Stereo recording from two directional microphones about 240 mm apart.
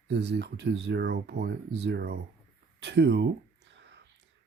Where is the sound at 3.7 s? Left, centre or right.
Right.